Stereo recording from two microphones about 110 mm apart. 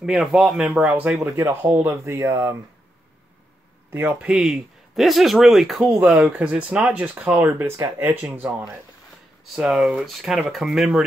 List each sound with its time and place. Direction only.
0.0 s a man's voice: 5° right (ahead or behind)
1.2 s speech: 25° right (ahead or behind)
3.9 s speech: 20° right (ahead or behind)
4.3 s a man's voice: 5° right (ahead or behind)
5.9 s a man's voice: 15° right (ahead or behind)